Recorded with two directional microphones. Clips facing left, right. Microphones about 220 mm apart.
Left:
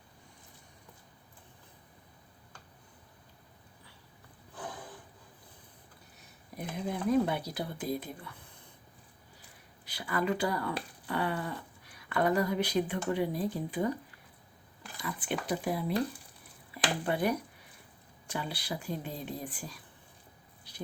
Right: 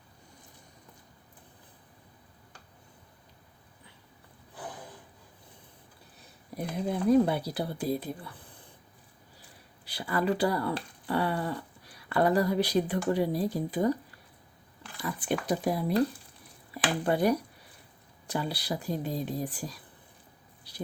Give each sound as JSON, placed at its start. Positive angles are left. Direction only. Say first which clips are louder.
{"t": 6.8, "sound": "speech", "louder": "right 5 dB", "side_deg": -35}
{"t": 9.8, "sound": "speech", "louder": "right 3 dB", "side_deg": -30}
{"t": 15.2, "sound": "speech", "louder": "right 5 dB", "side_deg": -40}